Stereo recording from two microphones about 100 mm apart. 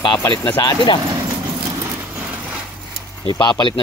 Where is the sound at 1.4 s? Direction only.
35° right (ahead or behind).